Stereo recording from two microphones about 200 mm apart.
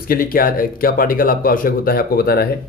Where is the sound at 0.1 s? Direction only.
45° left (ahead or behind).